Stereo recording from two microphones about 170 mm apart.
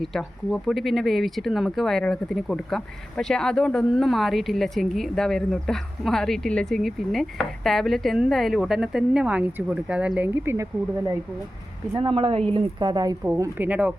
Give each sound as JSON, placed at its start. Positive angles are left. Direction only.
{"t": 0.0, "sound": "speech", "side_deg": 0}
{"t": 11.9, "sound": "a woman's voice", "side_deg": -30}